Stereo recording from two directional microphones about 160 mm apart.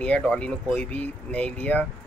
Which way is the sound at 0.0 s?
5° left (ahead or behind).